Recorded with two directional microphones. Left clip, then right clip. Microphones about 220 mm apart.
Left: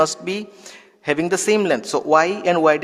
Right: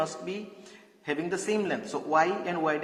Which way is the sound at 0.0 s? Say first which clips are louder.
Left 12 dB; 50° left (ahead or behind).